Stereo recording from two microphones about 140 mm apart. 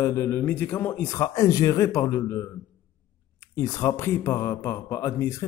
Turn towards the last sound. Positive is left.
turn(degrees=20)  # may be behind; listen again after turning